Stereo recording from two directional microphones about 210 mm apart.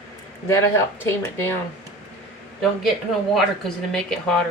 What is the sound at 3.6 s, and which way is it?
Speech, 5° left (ahead or behind).